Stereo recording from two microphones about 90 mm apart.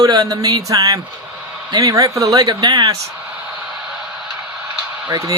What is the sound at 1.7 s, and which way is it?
A man's voice, 40° right (ahead or behind).